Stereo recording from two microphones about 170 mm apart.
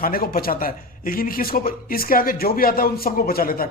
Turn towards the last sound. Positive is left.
turn(degrees=60)  # may be behind; listen again after turning